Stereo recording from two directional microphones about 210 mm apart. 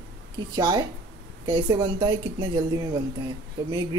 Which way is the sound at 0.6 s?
20° right (ahead or behind).